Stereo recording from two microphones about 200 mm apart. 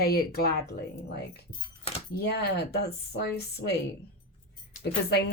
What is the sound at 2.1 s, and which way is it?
Speech, 55° left (ahead or behind).